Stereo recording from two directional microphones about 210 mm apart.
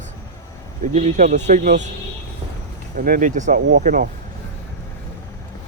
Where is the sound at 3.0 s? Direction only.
40° right (ahead or behind).